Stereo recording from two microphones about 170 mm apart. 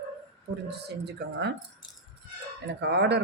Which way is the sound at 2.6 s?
80° right.